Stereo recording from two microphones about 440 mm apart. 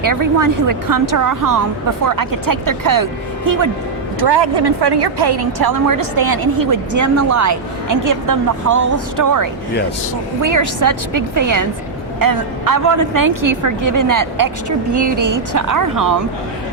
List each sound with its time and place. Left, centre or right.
0.0 s a woman's voice: right
4.2 s a woman's voice: right